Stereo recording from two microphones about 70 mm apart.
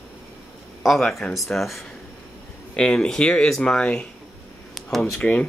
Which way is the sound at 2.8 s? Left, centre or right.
Centre.